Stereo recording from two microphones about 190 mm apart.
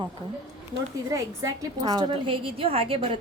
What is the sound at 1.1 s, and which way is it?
A woman's voice, 20° right (ahead or behind).